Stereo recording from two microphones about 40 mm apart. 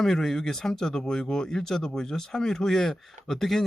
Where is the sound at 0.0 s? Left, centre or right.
Centre.